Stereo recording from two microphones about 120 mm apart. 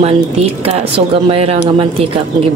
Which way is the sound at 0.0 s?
55° right (ahead or behind).